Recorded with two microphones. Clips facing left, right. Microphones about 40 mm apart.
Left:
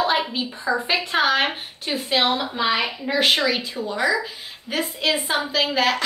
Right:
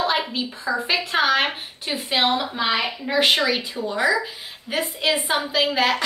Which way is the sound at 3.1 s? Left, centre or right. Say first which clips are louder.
Right 1 dB; centre.